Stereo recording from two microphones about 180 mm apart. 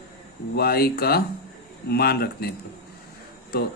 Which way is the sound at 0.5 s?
60° left (ahead or behind).